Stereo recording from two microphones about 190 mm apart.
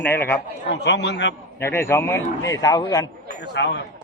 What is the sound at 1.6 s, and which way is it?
Speech, 15° left (ahead or behind).